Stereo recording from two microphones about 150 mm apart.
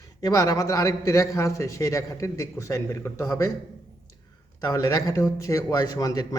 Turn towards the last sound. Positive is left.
turn(degrees=25)  # may be behind; listen again after turning